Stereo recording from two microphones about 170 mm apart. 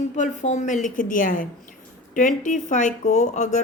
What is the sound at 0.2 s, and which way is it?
Speech, 45° left (ahead or behind).